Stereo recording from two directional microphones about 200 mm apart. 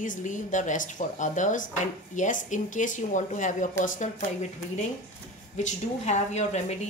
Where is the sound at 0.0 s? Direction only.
40° left (ahead or behind).